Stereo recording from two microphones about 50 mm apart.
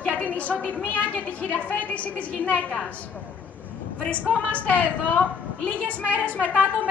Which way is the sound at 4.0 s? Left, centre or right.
Left.